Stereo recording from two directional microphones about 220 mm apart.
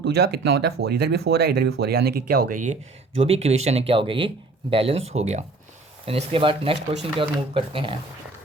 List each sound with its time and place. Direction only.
0.0 s speech: 45° right (ahead or behind); by 7.9 s 25° right (ahead or behind)